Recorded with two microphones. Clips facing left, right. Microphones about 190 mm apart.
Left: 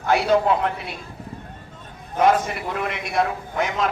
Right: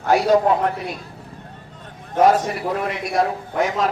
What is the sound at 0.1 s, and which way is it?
Speech, 40° right (ahead or behind).